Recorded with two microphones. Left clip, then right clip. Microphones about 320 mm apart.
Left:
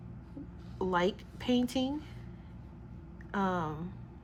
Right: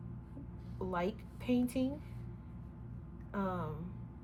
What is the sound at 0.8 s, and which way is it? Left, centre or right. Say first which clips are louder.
A woman's voice: left 7 dB; left.